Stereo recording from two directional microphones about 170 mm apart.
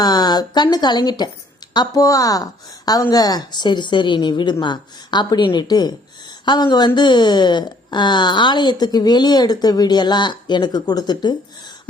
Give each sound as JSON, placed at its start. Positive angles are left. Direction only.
{"t": 0.0, "sound": "a woman's voice", "side_deg": 25}